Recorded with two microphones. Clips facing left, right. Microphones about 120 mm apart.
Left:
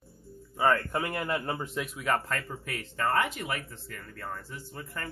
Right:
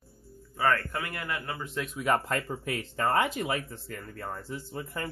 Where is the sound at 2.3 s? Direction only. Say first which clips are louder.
Right 4 dB; 25° right (ahead or behind).